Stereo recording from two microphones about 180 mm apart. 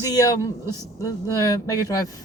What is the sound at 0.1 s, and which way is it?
A woman's voice, 20° left (ahead or behind).